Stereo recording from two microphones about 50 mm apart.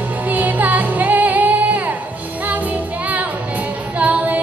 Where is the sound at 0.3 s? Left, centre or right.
Right.